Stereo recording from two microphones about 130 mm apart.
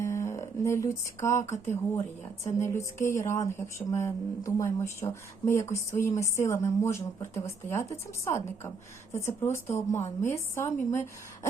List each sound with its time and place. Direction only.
0.0 s music: 20° left (ahead or behind)
1.5 s a woman's voice: 20° left (ahead or behind)